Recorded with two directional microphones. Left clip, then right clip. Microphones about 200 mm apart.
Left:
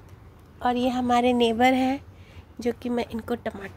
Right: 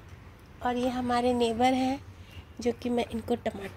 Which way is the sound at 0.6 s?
25° left (ahead or behind).